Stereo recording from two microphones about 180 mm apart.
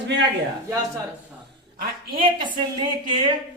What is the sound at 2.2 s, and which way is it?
Speech, 25° right (ahead or behind).